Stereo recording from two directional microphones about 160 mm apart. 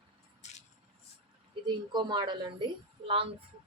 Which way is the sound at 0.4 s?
45° left (ahead or behind).